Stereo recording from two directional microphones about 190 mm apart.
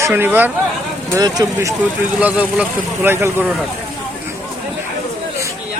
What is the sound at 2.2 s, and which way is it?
Speech, 10° right (ahead or behind).